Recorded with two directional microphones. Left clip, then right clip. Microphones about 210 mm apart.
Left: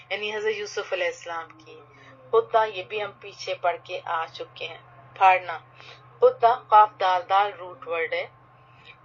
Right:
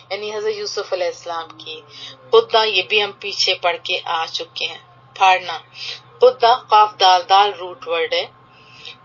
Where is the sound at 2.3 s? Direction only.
45° right (ahead or behind).